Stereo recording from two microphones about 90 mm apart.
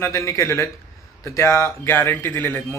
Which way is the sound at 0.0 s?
35° left (ahead or behind).